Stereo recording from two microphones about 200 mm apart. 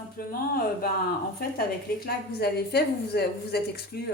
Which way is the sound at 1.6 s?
50° left (ahead or behind).